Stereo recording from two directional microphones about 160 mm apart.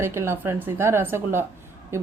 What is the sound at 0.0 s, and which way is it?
A woman's voice, 15° right (ahead or behind).